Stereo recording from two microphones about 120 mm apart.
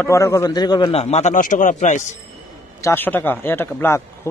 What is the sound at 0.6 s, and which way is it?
Speech, 35° left (ahead or behind).